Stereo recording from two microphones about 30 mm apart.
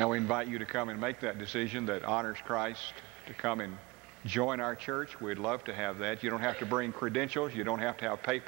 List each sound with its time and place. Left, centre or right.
0.0 s a man's voice: right